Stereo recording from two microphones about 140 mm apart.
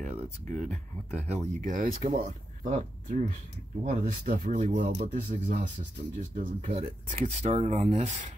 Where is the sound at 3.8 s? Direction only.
80° right.